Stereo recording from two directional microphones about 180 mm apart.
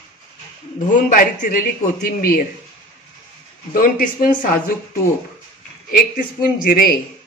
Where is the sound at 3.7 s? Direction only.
50° left (ahead or behind).